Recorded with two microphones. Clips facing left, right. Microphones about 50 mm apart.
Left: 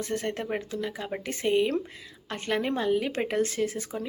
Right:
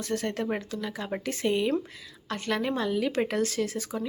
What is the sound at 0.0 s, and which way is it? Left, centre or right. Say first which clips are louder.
Speech: right 1 dB; left.